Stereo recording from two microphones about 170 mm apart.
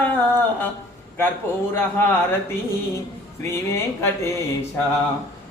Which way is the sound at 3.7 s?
15° left (ahead or behind).